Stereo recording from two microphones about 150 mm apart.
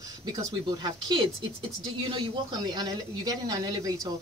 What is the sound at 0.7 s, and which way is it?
Speech, 30° right (ahead or behind).